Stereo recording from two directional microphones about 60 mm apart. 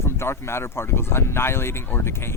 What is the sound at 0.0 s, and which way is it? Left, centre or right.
Speech, left.